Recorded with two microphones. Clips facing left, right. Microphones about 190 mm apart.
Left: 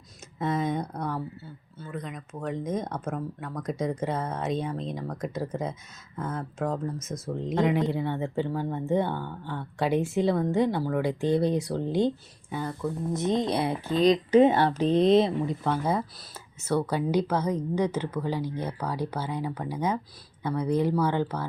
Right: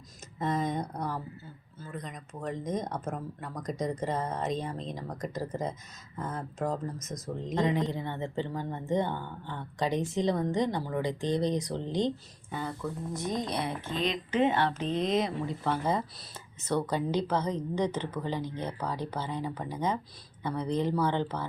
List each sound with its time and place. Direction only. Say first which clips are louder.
0.3 s speech: left 3 dB; 5° left (ahead or behind)
13.1 s speech: left 7 dB; 25° left (ahead or behind)
15.4 s speech: left 3 dB; 15° left (ahead or behind)